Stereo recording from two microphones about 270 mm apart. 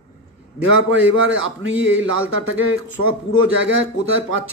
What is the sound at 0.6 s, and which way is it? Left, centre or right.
Speech, right.